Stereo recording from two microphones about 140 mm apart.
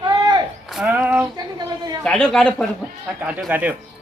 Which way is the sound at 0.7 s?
10° right (ahead or behind).